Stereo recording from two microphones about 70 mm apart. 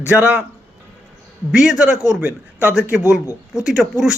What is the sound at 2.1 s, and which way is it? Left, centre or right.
A man's voice, right.